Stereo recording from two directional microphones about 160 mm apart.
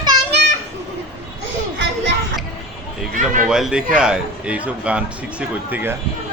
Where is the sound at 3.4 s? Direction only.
5° right (ahead or behind).